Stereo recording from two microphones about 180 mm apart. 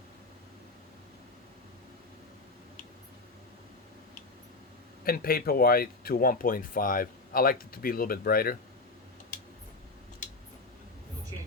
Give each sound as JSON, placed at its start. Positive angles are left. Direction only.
{"t": 5.0, "sound": "speech", "side_deg": 55}